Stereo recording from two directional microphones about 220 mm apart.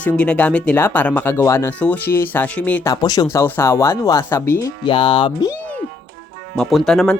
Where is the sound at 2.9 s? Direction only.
20° left (ahead or behind).